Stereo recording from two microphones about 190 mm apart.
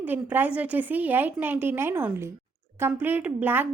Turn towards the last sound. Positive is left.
turn(degrees=-10)  # may be behind; listen again after turning